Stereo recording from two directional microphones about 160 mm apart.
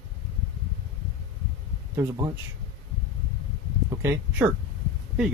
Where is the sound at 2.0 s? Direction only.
25° right (ahead or behind).